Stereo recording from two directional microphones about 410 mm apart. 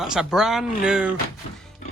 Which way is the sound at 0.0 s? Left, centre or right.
Centre.